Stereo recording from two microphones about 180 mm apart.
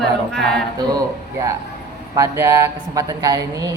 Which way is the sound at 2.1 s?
15° right (ahead or behind).